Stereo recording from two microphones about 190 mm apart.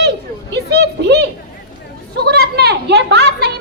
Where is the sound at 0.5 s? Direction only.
60° right (ahead or behind).